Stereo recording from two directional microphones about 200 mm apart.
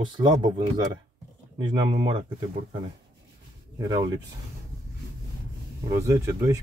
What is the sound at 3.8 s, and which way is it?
Speech, 20° right (ahead or behind).